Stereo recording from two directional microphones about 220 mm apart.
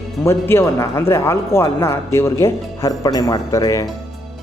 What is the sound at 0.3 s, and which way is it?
Speech, 10° left (ahead or behind).